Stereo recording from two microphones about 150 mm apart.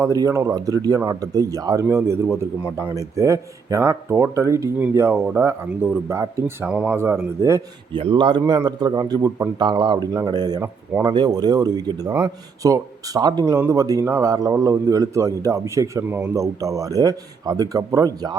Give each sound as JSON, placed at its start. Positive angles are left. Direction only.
{"t": 0.0, "sound": "speech", "side_deg": -20}
{"t": 6.7, "sound": "speech", "side_deg": -5}
{"t": 7.9, "sound": "speech", "side_deg": -35}